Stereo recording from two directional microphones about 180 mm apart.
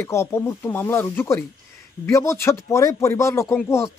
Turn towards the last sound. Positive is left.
turn(degrees=15)  # may be behind; listen again after turning